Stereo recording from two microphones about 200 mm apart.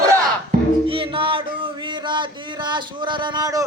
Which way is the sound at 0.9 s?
25° right (ahead or behind).